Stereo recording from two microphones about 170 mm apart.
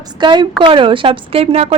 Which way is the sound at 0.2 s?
25° right (ahead or behind).